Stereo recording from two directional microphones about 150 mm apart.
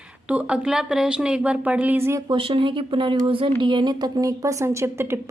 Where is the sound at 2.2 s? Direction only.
35° right (ahead or behind).